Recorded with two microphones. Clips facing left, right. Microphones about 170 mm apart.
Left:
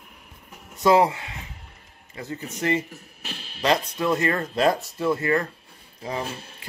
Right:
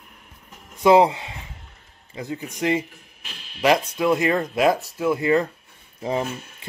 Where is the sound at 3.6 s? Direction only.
10° right (ahead or behind).